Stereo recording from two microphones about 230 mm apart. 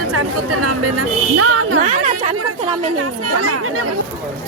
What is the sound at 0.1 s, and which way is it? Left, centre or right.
Speech, right.